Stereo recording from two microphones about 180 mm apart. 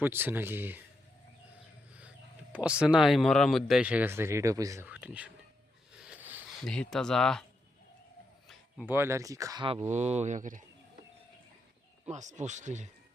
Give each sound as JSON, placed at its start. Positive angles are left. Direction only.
{"t": 0.0, "sound": "speech", "side_deg": -10}
{"t": 2.0, "sound": "speech", "side_deg": -5}
{"t": 4.9, "sound": "speech", "side_deg": -5}
{"t": 5.9, "sound": "a sound", "side_deg": -5}
{"t": 6.6, "sound": "speech", "side_deg": 0}
{"t": 8.9, "sound": "speech", "side_deg": -15}
{"t": 12.0, "sound": "speech", "side_deg": -40}